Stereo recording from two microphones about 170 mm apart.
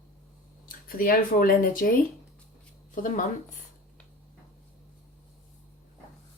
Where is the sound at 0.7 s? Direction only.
55° left (ahead or behind).